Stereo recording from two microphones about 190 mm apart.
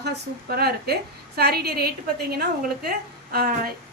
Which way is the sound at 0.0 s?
55° right (ahead or behind).